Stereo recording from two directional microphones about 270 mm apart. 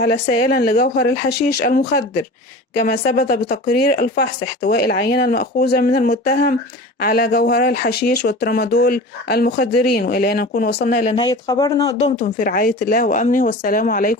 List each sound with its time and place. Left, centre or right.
0.0 s speech: left
11.1 s speech: centre
11.9 s speech: left